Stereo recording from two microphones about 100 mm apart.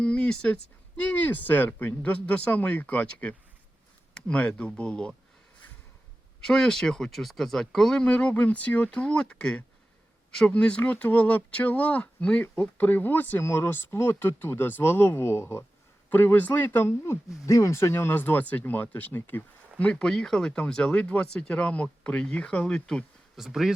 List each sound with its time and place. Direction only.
0.0 s speech: 10° left (ahead or behind)
6.4 s speech: 5° left (ahead or behind)